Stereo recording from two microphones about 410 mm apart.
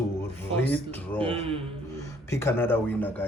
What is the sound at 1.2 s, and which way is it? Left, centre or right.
Speech, centre.